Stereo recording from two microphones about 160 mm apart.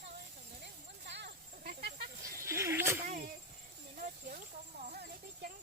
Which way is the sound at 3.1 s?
60° right (ahead or behind).